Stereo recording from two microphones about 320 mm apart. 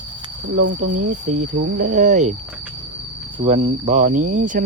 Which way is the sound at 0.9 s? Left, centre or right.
Right.